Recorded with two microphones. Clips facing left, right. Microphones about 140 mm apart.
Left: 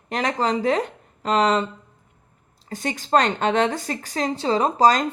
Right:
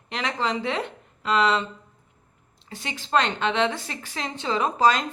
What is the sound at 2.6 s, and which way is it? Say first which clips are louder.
Speech: left 8 dB; 45° left (ahead or behind).